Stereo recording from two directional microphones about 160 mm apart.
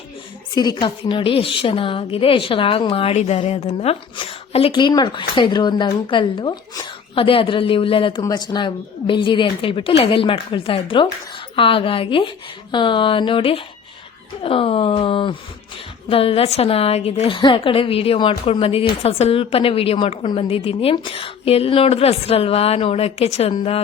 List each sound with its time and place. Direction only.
0.5 s a woman's voice: 25° left (ahead or behind)